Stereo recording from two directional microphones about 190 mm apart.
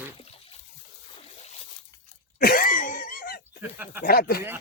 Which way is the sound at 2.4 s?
50° left (ahead or behind).